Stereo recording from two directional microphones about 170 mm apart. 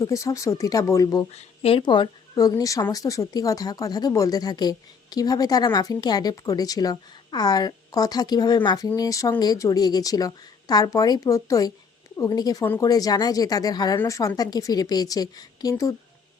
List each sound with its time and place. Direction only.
0.0 s a woman's voice: 20° left (ahead or behind)
1.3 s a woman's voice: 35° left (ahead or behind); by 16.0 s 20° left (ahead or behind)